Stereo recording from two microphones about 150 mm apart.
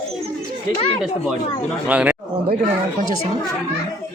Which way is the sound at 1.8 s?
10° right (ahead or behind).